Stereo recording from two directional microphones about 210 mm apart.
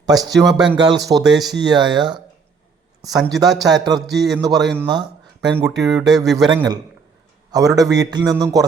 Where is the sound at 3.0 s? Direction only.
15° right (ahead or behind).